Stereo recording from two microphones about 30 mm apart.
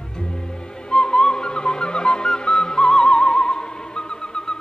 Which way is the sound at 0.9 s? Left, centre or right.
Left.